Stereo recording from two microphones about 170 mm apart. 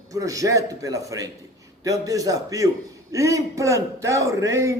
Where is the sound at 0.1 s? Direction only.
20° right (ahead or behind).